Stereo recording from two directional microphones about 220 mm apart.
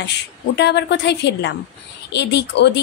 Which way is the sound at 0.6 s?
50° left (ahead or behind).